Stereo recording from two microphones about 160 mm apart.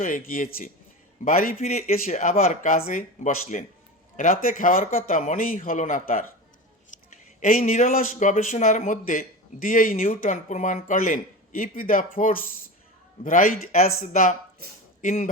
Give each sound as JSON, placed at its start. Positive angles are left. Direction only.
{"t": 0.0, "sound": "speech", "side_deg": 60}
{"t": 1.5, "sound": "speech", "side_deg": 45}
{"t": 4.2, "sound": "speech", "side_deg": 60}